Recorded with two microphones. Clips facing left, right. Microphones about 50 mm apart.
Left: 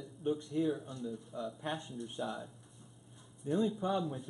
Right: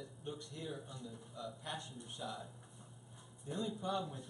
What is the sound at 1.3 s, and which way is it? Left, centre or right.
Speech, left.